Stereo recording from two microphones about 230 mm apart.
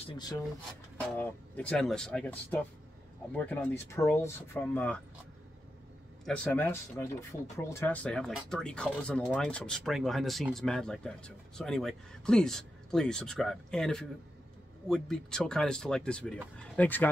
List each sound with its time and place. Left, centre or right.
0.0 s speech: centre
1.1 s speech: centre
6.2 s speech: centre